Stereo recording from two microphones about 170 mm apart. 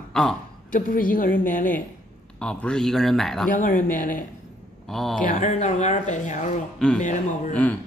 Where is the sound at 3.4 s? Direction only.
50° left (ahead or behind).